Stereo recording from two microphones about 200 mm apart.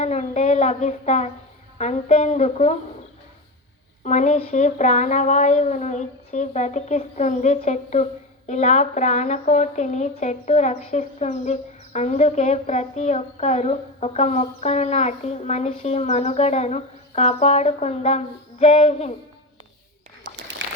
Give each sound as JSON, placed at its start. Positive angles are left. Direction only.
{"t": 0.0, "sound": "a woman's voice", "side_deg": 35}
{"t": 4.0, "sound": "a woman's voice", "side_deg": 35}
{"t": 20.2, "sound": "a sound", "side_deg": -50}